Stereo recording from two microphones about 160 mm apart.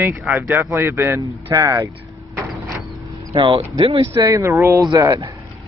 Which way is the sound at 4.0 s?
20° right (ahead or behind).